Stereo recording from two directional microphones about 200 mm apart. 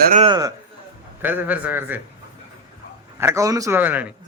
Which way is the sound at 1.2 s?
10° right (ahead or behind).